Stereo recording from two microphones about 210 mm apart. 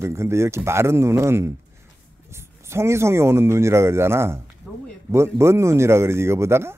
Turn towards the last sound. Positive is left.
turn(degrees=-10)  # may be behind; listen again after turning